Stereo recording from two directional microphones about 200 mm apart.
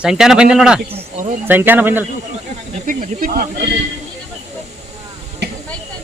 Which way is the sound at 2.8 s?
40° right (ahead or behind).